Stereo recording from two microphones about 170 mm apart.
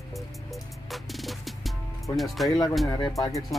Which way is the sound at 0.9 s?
Centre (ahead or behind).